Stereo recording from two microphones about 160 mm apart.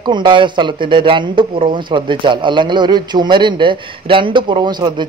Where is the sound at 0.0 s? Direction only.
30° right (ahead or behind).